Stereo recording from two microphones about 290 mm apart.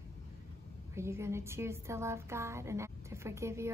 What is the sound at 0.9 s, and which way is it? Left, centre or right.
A woman's voice, centre.